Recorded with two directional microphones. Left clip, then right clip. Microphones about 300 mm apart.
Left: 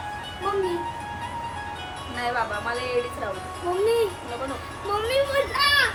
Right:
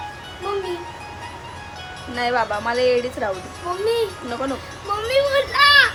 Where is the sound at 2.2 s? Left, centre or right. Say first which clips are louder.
Right 6 dB; right.